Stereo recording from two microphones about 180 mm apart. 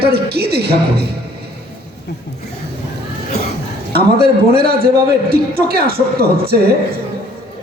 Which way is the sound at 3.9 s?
60° right (ahead or behind).